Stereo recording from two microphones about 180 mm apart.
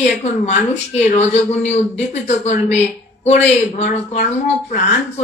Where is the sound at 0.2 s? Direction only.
40° left (ahead or behind).